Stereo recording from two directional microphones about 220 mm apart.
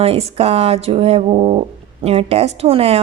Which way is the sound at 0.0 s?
25° right (ahead or behind).